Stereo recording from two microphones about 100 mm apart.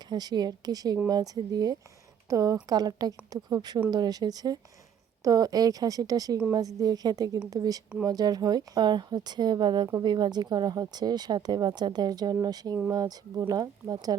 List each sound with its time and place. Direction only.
0.1 s a woman's voice: 45° right (ahead or behind)